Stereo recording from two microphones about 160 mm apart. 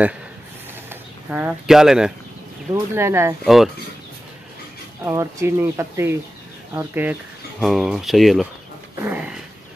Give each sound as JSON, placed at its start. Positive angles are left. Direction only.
{"t": 0.8, "sound": "speech", "side_deg": -10}
{"t": 2.7, "sound": "speech", "side_deg": -15}
{"t": 3.4, "sound": "speech", "side_deg": 0}
{"t": 5.0, "sound": "speech", "side_deg": -15}
{"t": 7.6, "sound": "speech", "side_deg": 0}